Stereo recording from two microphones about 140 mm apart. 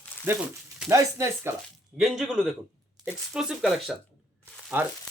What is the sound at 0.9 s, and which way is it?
Speech, 15° right (ahead or behind).